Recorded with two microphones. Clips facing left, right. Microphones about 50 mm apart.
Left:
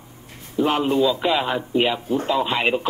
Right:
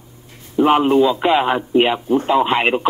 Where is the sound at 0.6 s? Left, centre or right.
Right.